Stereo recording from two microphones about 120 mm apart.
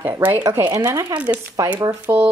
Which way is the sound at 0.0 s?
15° right (ahead or behind).